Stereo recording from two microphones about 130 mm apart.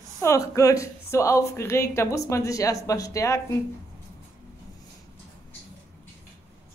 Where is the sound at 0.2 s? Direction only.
25° left (ahead or behind).